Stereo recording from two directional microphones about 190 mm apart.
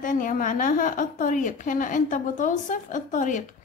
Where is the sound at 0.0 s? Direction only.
45° left (ahead or behind).